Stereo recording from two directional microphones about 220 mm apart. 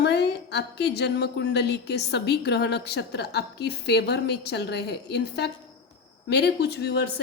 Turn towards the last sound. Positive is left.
turn(degrees=50)  # may be behind; listen again after turning